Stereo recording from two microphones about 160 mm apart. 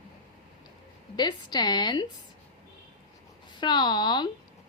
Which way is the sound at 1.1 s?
25° left (ahead or behind).